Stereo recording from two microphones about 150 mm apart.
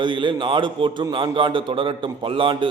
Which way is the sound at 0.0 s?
35° right (ahead or behind).